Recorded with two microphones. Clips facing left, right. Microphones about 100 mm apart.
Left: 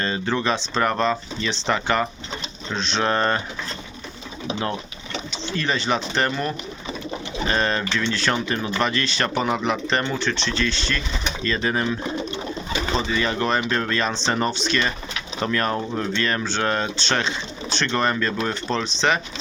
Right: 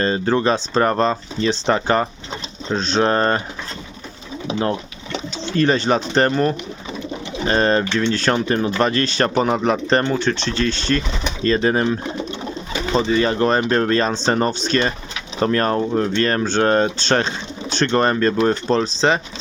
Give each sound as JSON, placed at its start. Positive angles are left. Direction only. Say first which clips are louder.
{"t": 0.0, "sound": "speech", "louder": "right 6 dB", "side_deg": -40}
{"t": 5.5, "sound": "speech", "louder": "right 7 dB", "side_deg": -45}
{"t": 11.4, "sound": "speech", "louder": "right 7 dB", "side_deg": -35}